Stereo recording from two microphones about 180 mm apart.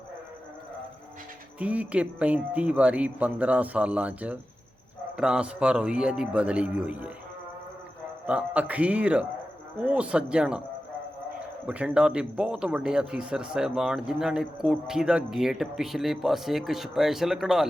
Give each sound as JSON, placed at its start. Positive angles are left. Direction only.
{"t": 1.5, "sound": "speech", "side_deg": -10}
{"t": 8.3, "sound": "speech", "side_deg": -5}
{"t": 11.6, "sound": "speech", "side_deg": -5}